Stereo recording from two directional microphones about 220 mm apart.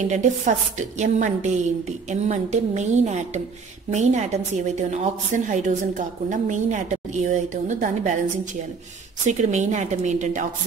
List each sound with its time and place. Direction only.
0.1 s a woman's voice: 35° right (ahead or behind)
9.2 s a woman's voice: 35° right (ahead or behind)